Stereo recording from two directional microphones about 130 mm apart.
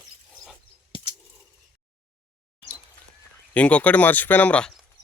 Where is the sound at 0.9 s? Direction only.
50° left (ahead or behind).